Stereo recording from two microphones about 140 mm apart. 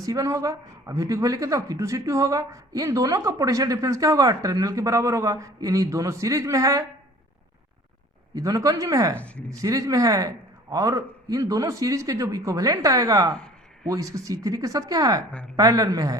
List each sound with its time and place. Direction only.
0.0 s speech: 25° right (ahead or behind)
8.4 s speech: 25° right (ahead or behind)